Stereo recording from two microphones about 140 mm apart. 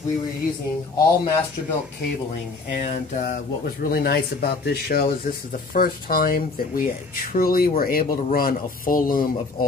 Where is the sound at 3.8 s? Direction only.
90° left.